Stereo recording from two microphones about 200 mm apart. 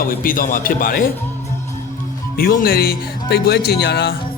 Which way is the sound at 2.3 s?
45° left (ahead or behind).